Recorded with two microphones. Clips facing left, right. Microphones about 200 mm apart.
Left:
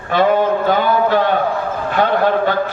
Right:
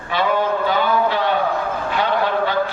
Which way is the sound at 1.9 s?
50° left (ahead or behind).